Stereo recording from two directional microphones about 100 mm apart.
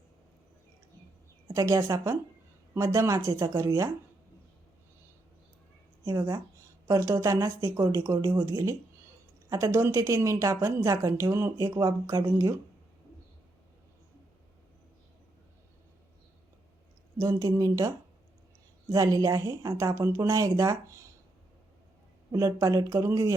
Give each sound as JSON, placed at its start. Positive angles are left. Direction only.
{"t": 1.5, "sound": "a woman's voice", "side_deg": -30}
{"t": 6.1, "sound": "a woman's voice", "side_deg": -35}
{"t": 17.2, "sound": "a woman's voice", "side_deg": -35}
{"t": 22.3, "sound": "a woman's voice", "side_deg": -30}